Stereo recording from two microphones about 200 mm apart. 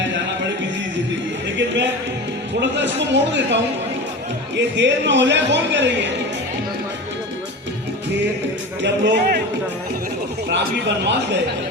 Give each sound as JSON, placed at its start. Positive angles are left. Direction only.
{"t": 1.5, "sound": "a man's voice", "side_deg": -65}
{"t": 8.8, "sound": "a man's voice", "side_deg": -60}
{"t": 10.5, "sound": "a man's voice", "side_deg": -60}